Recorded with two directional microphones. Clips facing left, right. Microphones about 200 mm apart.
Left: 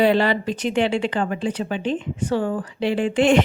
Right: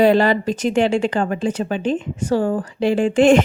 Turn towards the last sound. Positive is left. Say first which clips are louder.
# right 4 dB
turn(degrees=-45)  # may be behind; listen again after turning